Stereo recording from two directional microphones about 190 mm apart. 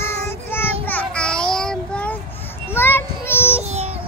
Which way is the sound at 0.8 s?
5° left (ahead or behind).